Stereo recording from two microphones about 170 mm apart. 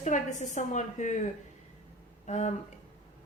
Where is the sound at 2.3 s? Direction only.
40° left (ahead or behind).